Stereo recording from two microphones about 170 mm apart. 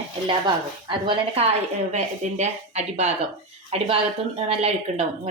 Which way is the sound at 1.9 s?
45° right (ahead or behind).